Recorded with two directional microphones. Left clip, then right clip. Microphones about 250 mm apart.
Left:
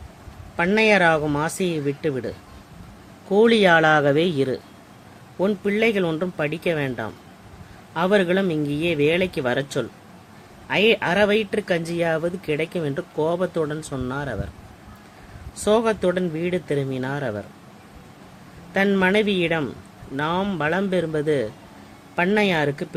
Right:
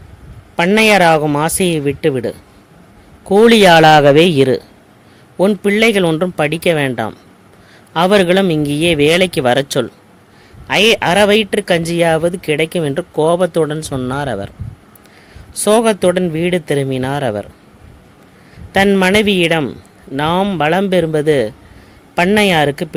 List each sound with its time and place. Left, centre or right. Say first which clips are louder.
0.5 s speech: right 7 dB; right
15.6 s speech: right 8 dB; right
18.7 s speech: right 8 dB; right